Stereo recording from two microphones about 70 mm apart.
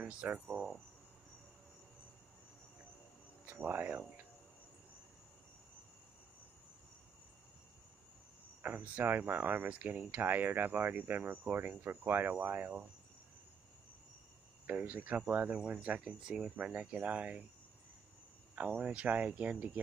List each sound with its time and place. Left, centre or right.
0.0 s speech: centre
3.4 s speech: right
8.6 s speech: right
14.7 s speech: right
18.5 s speech: right